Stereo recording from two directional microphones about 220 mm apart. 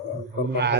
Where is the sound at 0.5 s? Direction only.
50° right (ahead or behind).